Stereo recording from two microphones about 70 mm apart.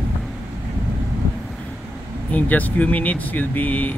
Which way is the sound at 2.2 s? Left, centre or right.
Left.